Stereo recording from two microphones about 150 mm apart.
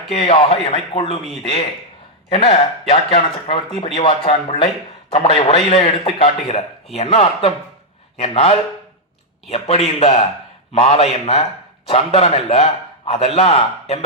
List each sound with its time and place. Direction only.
0.1 s a man's voice: 40° left (ahead or behind)
2.3 s a man's voice: 40° left (ahead or behind)